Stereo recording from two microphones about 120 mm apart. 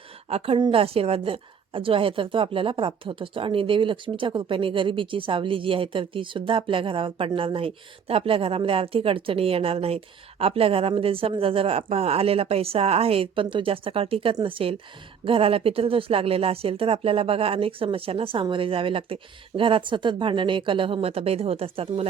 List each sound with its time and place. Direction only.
0.3 s a woman's voice: 55° right (ahead or behind)